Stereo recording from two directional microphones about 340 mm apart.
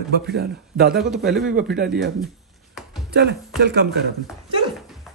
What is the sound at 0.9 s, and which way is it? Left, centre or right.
Speech, centre.